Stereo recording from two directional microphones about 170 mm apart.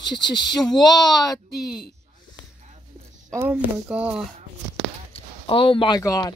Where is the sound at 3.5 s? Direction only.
5° right (ahead or behind).